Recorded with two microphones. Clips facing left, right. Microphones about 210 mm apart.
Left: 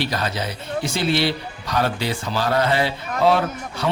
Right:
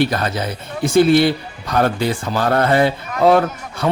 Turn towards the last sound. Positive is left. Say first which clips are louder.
# right 6 dB
turn(degrees=-50)  # may be behind; listen again after turning